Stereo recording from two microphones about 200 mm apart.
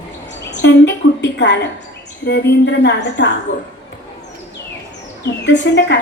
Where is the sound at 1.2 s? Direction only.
60° left (ahead or behind).